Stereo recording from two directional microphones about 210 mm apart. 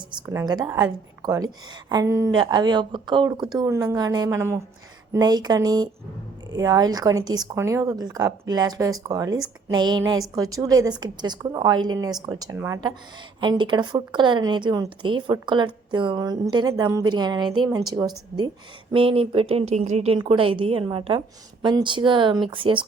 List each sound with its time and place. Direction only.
0.1 s speech: 15° right (ahead or behind)
18.9 s speech: 25° right (ahead or behind)